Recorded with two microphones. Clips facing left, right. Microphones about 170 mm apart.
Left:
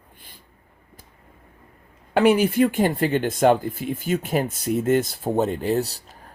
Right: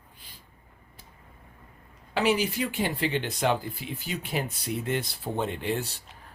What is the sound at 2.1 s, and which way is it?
Speech, 50° left (ahead or behind).